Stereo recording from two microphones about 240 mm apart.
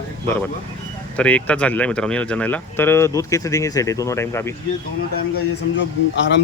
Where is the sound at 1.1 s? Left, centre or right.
Centre.